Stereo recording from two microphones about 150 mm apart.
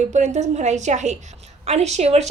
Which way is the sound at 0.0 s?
50° right (ahead or behind).